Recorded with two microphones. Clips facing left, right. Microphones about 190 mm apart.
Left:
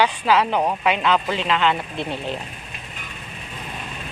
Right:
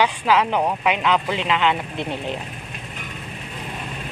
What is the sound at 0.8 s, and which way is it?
Speech, 10° right (ahead or behind).